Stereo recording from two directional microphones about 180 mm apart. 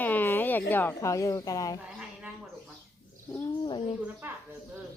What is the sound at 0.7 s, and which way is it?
Speech, 10° left (ahead or behind).